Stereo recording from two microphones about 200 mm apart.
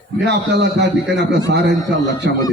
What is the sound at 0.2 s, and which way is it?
A man's voice, 60° right (ahead or behind).